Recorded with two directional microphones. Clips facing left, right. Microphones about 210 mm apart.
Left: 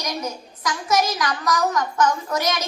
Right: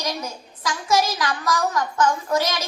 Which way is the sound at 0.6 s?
25° right (ahead or behind).